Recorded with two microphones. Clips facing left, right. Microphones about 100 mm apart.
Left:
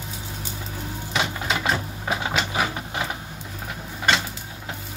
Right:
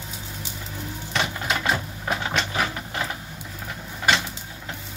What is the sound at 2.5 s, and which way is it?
Sewing machine, 15° left (ahead or behind).